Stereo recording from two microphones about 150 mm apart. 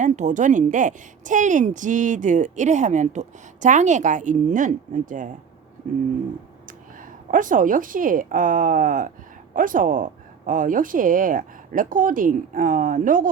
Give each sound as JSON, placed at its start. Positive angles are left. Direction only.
{"t": 0.0, "sound": "a woman's voice", "side_deg": -55}
{"t": 6.7, "sound": "a woman's voice", "side_deg": -65}